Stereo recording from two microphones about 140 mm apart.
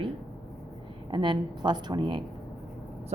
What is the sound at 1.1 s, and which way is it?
A woman's voice, 35° right (ahead or behind).